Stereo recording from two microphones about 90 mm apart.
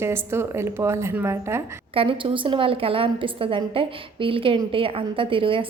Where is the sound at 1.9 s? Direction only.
85° right.